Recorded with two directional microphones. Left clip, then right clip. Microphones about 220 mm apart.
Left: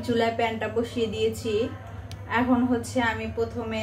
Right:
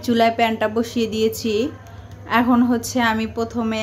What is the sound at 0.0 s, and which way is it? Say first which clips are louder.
Speech: right 7 dB; 50° right (ahead or behind).